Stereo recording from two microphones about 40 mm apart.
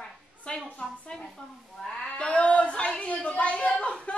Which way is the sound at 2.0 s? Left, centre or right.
Left.